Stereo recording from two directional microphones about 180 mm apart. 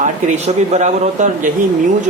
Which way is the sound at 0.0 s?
40° right (ahead or behind).